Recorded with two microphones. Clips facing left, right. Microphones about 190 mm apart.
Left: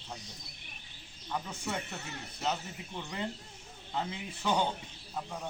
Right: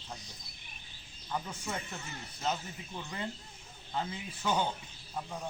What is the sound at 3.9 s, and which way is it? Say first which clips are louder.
Speech: left 1 dB; 5° right (ahead or behind).